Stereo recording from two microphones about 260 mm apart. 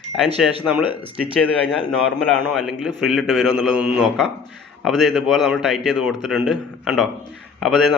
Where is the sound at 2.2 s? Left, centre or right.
Centre.